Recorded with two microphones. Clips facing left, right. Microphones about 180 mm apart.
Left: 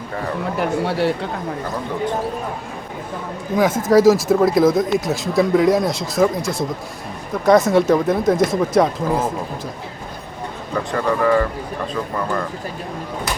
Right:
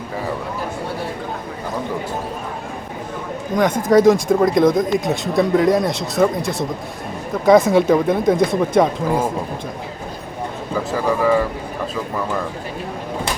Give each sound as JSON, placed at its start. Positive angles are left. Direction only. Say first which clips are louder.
{"t": 0.5, "sound": "speech", "louder": "left 5 dB", "side_deg": 75}
{"t": 3.5, "sound": "speech", "louder": "even", "side_deg": 5}
{"t": 10.8, "sound": "speech", "louder": "even", "side_deg": -5}